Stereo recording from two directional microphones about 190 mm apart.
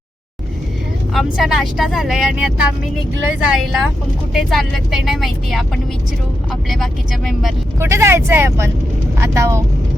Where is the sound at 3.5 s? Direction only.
Centre (ahead or behind).